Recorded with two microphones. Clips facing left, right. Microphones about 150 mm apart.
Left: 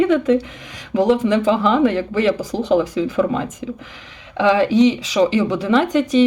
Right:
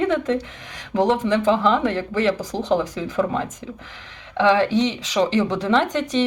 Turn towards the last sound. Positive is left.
turn(degrees=10)  # may be behind; listen again after turning